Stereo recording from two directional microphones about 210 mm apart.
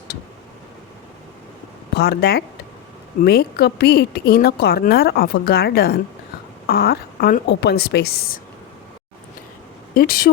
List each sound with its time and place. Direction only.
2.0 s speech: 50° left (ahead or behind)
9.9 s speech: 45° left (ahead or behind)